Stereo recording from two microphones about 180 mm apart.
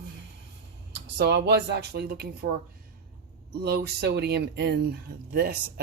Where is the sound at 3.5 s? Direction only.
60° right (ahead or behind).